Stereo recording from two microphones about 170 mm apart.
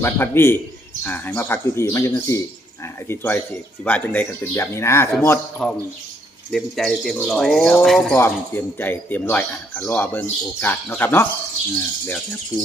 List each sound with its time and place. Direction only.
0.0 s speech: 15° left (ahead or behind)
6.5 s speech: centre (ahead or behind)